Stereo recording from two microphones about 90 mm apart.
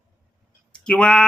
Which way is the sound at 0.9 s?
10° left (ahead or behind).